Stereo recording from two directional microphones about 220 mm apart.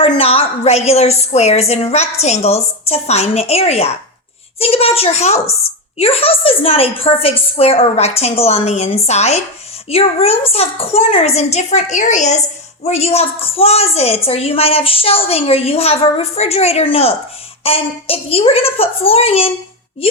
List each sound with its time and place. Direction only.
0.0 s a woman's voice: 25° left (ahead or behind)